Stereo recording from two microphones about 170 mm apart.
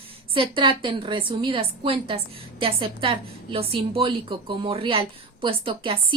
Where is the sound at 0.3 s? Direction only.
30° right (ahead or behind).